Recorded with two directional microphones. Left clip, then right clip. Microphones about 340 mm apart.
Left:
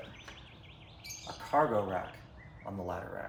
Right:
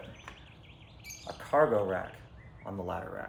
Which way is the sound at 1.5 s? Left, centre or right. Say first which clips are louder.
Right 3 dB; centre.